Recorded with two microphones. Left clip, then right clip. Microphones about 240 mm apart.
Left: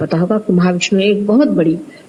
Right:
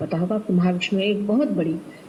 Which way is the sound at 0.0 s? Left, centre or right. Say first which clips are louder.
Left 9 dB; left.